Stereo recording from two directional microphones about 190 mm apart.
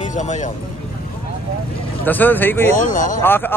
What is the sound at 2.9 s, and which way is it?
Speech, 45° left (ahead or behind).